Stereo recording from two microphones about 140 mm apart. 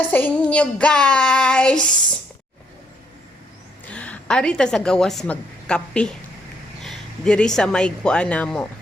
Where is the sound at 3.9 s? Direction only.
10° left (ahead or behind).